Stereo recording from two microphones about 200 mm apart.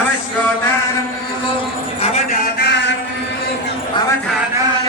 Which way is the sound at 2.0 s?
35° left (ahead or behind).